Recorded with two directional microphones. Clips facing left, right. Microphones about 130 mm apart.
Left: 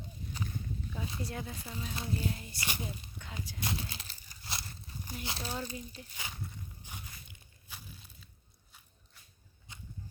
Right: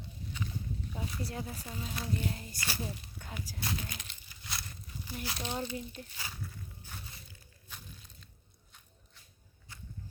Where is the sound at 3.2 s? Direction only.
40° right (ahead or behind).